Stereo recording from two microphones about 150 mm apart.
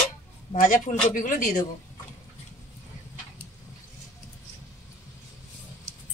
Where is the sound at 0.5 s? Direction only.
60° left (ahead or behind).